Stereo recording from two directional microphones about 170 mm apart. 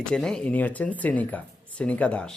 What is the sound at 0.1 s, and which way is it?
Speech, 5° left (ahead or behind).